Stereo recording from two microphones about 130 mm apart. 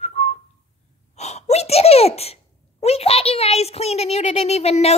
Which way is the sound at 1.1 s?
60° left (ahead or behind).